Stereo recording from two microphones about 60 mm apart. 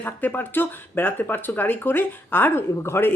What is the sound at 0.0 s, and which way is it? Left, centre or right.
Speech, left.